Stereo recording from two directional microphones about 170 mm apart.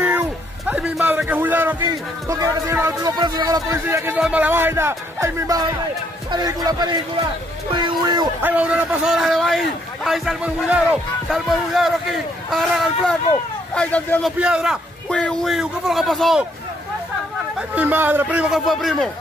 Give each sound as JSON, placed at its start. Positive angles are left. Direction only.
{"t": 0.0, "sound": "music", "side_deg": -10}
{"t": 1.9, "sound": "speech", "side_deg": -20}
{"t": 8.4, "sound": "a man's voice", "side_deg": -10}
{"t": 14.4, "sound": "a man's voice", "side_deg": -5}
{"t": 17.6, "sound": "speech", "side_deg": -10}